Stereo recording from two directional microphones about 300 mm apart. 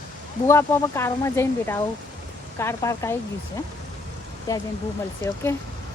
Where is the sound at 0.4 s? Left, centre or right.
Centre.